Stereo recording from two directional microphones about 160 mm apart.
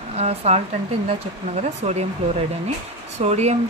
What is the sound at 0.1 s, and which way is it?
Speech, 40° right (ahead or behind).